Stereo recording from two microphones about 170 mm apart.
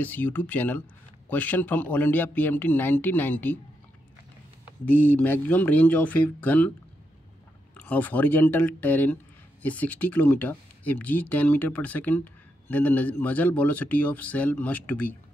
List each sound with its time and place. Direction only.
0.0 s speech: 10° left (ahead or behind)
4.8 s speech: 10° left (ahead or behind)
7.7 s speech: 10° left (ahead or behind)